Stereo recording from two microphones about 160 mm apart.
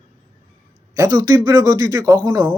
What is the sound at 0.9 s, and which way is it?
A man's voice, 20° right (ahead or behind).